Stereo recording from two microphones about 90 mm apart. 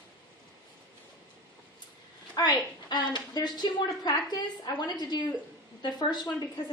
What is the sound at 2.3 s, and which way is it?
A woman's voice, 55° left (ahead or behind).